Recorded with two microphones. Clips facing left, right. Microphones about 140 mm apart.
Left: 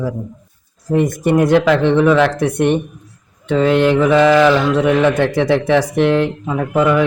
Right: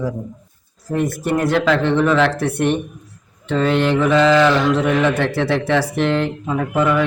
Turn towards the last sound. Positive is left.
turn(degrees=15)  # may be behind; listen again after turning